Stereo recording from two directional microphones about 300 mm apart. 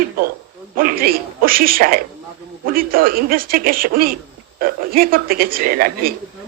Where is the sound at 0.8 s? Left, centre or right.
Right.